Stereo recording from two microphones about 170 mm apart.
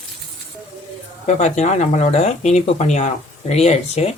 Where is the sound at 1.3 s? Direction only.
45° left (ahead or behind).